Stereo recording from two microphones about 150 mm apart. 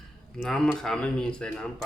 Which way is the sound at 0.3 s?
Centre (ahead or behind).